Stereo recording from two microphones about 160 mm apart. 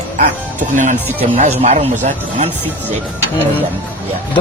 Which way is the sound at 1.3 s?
45° right (ahead or behind).